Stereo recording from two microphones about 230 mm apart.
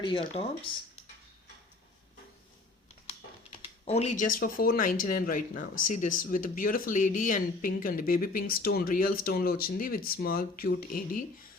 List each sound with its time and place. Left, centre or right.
0.0 s speech: left
3.6 s a sound: left
4.4 s speech: left